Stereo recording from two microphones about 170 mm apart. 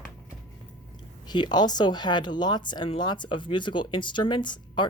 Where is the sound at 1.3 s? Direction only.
25° left (ahead or behind).